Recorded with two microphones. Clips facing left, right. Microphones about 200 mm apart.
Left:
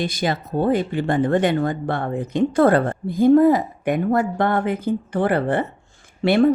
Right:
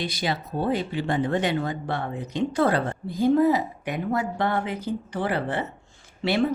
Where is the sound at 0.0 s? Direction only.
50° left (ahead or behind).